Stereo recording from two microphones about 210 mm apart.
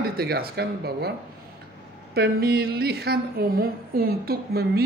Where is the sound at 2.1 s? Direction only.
50° right (ahead or behind).